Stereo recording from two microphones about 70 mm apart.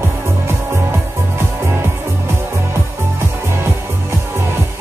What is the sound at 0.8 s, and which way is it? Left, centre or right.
Music, right.